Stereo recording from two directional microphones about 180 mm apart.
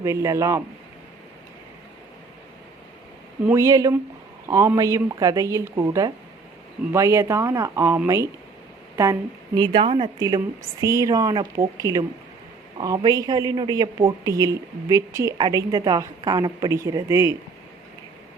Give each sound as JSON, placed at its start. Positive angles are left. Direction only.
{"t": 0.0, "sound": "speech", "side_deg": -15}
{"t": 3.4, "sound": "speech", "side_deg": -15}
{"t": 9.6, "sound": "a woman's voice", "side_deg": -25}